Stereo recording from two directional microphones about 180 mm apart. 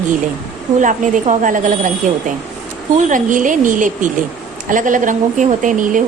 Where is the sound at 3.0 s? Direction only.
45° right (ahead or behind).